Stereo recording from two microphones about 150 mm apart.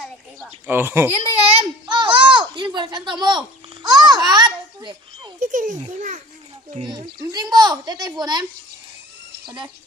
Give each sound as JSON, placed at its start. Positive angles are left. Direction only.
{"t": 0.7, "sound": "a child's voice", "side_deg": -15}
{"t": 1.2, "sound": "a sound", "side_deg": -40}
{"t": 2.7, "sound": "a child's voice", "side_deg": -30}
{"t": 5.4, "sound": "a child's voice", "side_deg": -55}
{"t": 6.8, "sound": "a woman's voice", "side_deg": -25}